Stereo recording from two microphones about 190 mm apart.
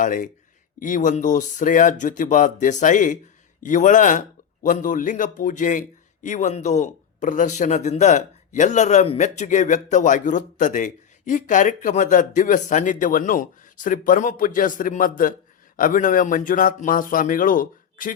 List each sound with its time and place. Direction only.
0.0 s a man's voice: 45° left (ahead or behind)